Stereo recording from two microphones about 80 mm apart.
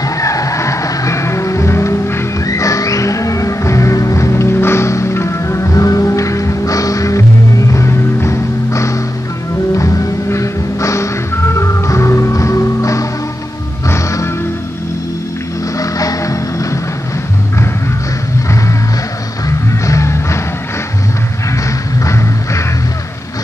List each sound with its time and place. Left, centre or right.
0.0 s music: left
15.8 s music: left
19.9 s music: left